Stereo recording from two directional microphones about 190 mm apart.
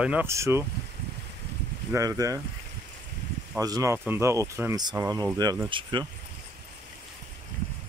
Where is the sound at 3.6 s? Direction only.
15° right (ahead or behind).